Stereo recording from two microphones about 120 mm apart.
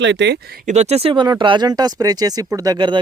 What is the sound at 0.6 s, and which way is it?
Speech, 70° right (ahead or behind).